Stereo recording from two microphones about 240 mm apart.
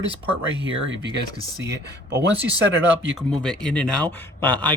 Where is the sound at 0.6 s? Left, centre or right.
Right.